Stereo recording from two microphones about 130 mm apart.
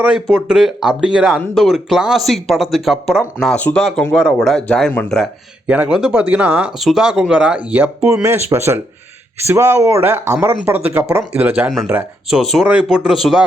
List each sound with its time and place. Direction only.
0.0 s speech: 10° right (ahead or behind)
3.6 s speech: 15° left (ahead or behind)
4.1 s speech: centre (ahead or behind)
5.6 s speech: 10° right (ahead or behind)
12.3 s speech: centre (ahead or behind)